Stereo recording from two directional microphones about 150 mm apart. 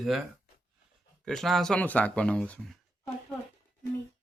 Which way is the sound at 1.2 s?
Centre (ahead or behind).